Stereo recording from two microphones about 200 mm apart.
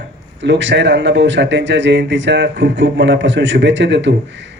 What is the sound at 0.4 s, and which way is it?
A man's voice, 65° right (ahead or behind).